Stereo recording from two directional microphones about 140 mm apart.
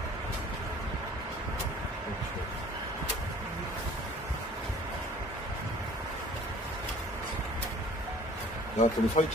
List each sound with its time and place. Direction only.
8.7 s speech: 60° left (ahead or behind)